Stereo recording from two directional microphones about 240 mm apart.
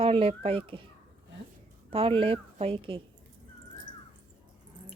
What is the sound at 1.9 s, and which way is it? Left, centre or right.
A woman's voice, right.